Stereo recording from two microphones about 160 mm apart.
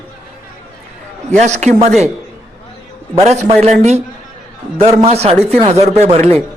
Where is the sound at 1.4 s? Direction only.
45° right (ahead or behind).